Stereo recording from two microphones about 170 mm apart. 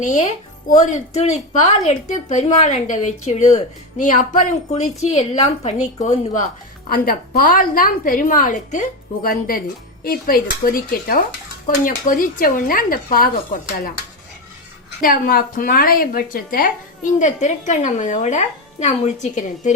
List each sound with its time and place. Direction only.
0.0 s a woman's voice: 45° left (ahead or behind)
6.9 s a woman's voice: 55° left (ahead or behind)
15.0 s a woman's voice: 60° left (ahead or behind)